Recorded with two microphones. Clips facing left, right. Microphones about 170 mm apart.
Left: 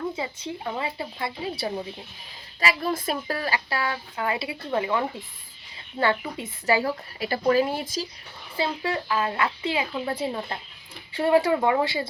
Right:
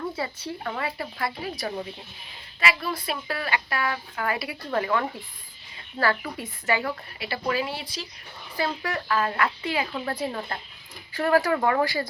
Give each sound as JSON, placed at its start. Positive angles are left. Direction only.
{"t": 0.2, "sound": "a woman's voice", "side_deg": 20}
{"t": 2.6, "sound": "a woman's voice", "side_deg": 40}
{"t": 6.7, "sound": "speech", "side_deg": 35}
{"t": 8.5, "sound": "a woman's voice", "side_deg": 25}